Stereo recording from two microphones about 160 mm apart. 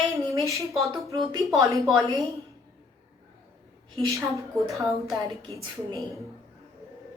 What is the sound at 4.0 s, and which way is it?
Child singing, 20° right (ahead or behind).